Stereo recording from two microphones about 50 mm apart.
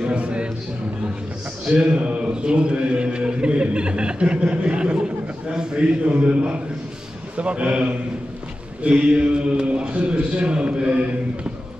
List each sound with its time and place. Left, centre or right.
0.0 s a sound: right
1.7 s mantra: centre
7.3 s a man's voice: right